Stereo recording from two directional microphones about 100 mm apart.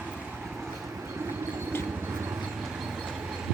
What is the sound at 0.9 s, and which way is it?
Vehicle, 20° right (ahead or behind).